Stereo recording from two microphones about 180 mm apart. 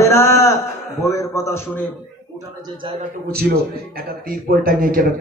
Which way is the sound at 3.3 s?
60° right (ahead or behind).